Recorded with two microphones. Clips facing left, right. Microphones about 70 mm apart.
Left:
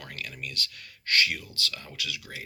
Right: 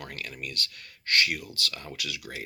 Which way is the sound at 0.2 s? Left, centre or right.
Right.